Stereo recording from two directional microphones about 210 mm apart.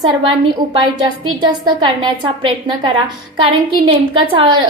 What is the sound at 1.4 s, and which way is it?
A woman's voice, 20° right (ahead or behind).